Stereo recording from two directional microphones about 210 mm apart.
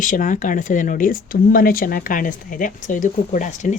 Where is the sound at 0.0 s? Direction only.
40° left (ahead or behind).